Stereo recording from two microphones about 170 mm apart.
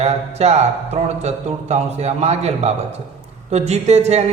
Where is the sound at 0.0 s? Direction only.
40° right (ahead or behind).